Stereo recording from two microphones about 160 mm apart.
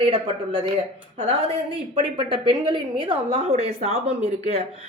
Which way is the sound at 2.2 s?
30° right (ahead or behind).